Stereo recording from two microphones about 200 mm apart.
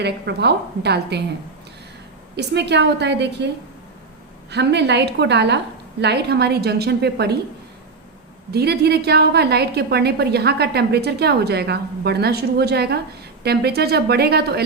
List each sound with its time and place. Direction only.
0.0 s a woman's voice: 55° right (ahead or behind)
2.3 s a woman's voice: 60° right (ahead or behind)
4.5 s a woman's voice: 60° right (ahead or behind)
8.5 s a woman's voice: 55° right (ahead or behind)